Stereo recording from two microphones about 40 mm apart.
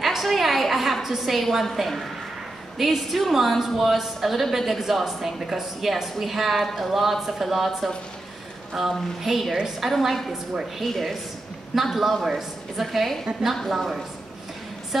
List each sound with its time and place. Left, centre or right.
0.0 s a sound: centre
1.0 s a woman's voice: centre
10.3 s a woman's voice: centre
10.8 s a woman's voice: centre